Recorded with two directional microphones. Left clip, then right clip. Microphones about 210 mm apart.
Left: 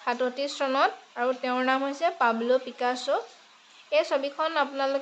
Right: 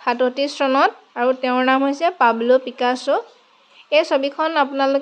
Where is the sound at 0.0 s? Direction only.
40° right (ahead or behind).